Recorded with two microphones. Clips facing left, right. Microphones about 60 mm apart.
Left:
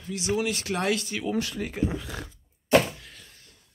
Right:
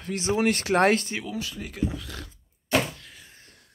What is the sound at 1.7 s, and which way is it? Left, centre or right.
Speech, left.